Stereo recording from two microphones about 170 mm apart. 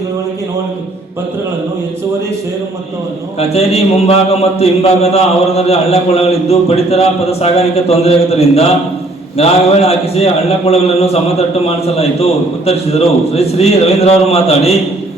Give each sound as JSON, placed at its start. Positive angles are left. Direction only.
{"t": 3.5, "sound": "a man's voice", "side_deg": 35}